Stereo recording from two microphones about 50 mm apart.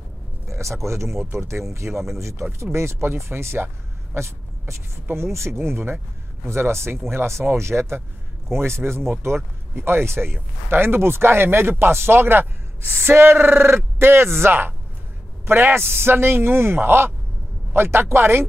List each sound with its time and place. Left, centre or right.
0.5 s a sound: right
0.8 s speech: right
3.6 s vehicle: right
5.0 s speech: right